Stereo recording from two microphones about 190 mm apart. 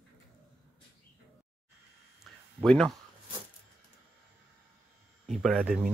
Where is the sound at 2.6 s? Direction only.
Centre (ahead or behind).